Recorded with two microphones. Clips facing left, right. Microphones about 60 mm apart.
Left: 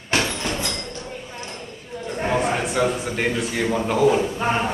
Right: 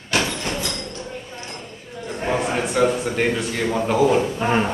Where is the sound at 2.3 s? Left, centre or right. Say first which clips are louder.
Right 1 dB; centre.